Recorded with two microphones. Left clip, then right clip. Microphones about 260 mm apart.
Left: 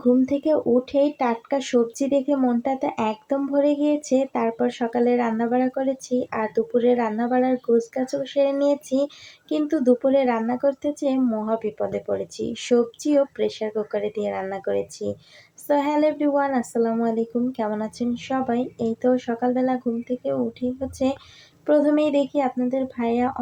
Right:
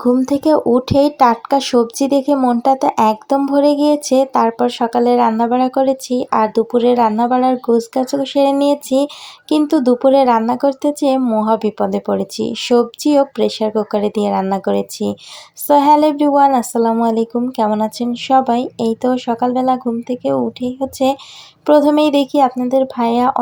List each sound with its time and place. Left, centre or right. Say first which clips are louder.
0.1 s speech: right 6 dB; right